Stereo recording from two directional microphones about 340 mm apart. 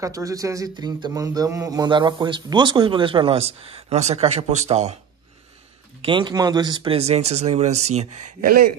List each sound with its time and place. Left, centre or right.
0.0 s speech: centre
6.0 s a man's voice: centre